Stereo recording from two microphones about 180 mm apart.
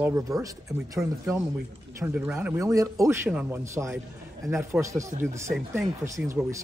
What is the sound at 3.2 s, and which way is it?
Speech, 5° right (ahead or behind).